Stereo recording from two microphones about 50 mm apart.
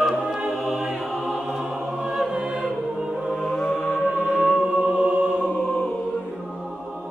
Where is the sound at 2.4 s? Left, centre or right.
Right.